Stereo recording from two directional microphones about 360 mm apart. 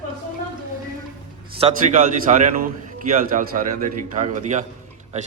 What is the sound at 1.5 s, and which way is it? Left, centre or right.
A man's voice, centre.